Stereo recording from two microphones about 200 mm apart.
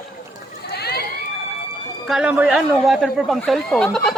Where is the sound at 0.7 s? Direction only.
50° left (ahead or behind).